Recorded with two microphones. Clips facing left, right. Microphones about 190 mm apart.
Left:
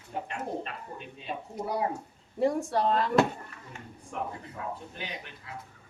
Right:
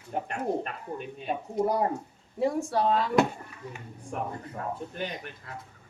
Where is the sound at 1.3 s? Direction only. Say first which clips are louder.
Right 7 dB; 45° right (ahead or behind).